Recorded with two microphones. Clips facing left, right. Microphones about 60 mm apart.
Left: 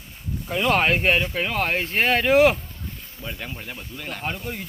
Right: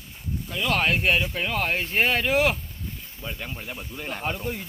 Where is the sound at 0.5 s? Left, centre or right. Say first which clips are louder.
Left 4 dB; left.